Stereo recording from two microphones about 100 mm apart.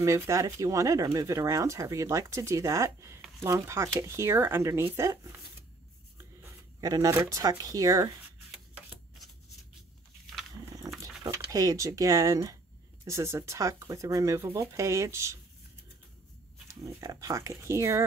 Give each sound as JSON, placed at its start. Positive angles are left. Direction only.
{"t": 0.0, "sound": "speech", "side_deg": -30}
{"t": 6.4, "sound": "speech", "side_deg": -35}
{"t": 11.0, "sound": "speech", "side_deg": -35}
{"t": 16.8, "sound": "speech", "side_deg": -35}